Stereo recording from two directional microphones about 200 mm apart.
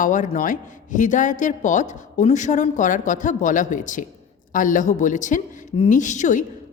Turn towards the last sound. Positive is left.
turn(degrees=40)  # may be behind; listen again after turning